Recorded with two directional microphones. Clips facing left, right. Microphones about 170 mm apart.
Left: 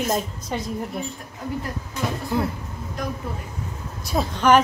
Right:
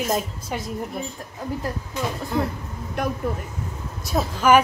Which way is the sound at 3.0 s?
65° right (ahead or behind).